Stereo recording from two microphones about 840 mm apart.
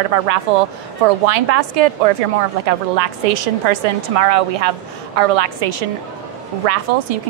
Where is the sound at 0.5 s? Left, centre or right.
Right.